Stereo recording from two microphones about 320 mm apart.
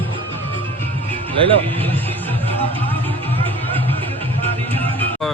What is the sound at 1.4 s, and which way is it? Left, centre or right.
Speech, centre.